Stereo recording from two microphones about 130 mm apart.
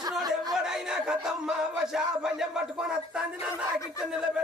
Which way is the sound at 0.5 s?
5° right (ahead or behind).